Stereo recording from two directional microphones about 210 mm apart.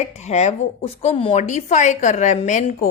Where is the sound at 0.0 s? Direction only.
30° left (ahead or behind).